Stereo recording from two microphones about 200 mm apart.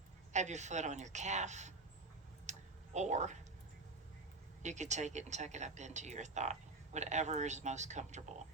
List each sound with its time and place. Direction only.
0.3 s speech: 35° right (ahead or behind)
2.5 s a sound: 35° right (ahead or behind)
4.6 s speech: 35° right (ahead or behind)